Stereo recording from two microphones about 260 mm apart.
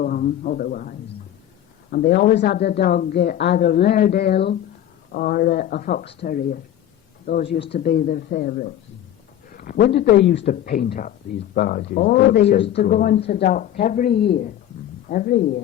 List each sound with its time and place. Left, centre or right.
0.0 s a man's voice: left